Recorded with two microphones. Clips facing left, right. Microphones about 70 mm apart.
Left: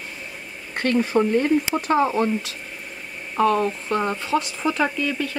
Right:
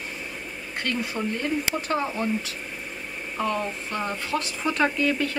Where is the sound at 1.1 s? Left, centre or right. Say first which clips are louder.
Left 10 dB; left.